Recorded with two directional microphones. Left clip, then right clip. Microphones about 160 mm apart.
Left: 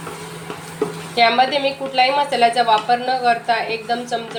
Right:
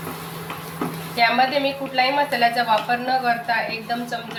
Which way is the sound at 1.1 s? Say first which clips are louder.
Left 3 dB; 35° left (ahead or behind).